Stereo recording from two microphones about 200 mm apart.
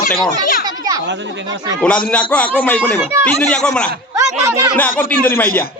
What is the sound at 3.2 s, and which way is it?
Speech, 5° left (ahead or behind).